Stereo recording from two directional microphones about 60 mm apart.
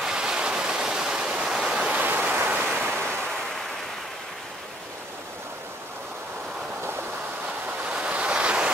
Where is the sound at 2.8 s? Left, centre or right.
Right.